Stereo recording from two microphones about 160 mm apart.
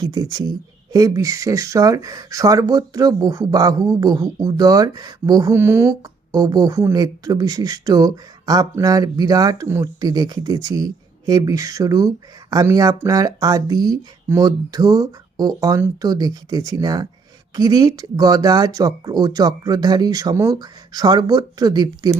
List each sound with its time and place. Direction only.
0.0 s speech: 25° right (ahead or behind)